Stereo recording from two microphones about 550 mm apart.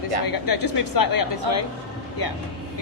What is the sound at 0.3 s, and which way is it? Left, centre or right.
Speech, left.